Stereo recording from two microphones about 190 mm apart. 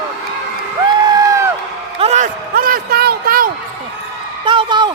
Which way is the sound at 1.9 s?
35° right (ahead or behind).